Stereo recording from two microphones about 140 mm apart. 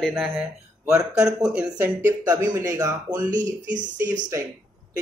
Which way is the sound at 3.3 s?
65° right (ahead or behind).